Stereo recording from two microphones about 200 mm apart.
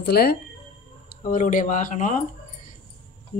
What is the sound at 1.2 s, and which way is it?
Speech, 40° left (ahead or behind).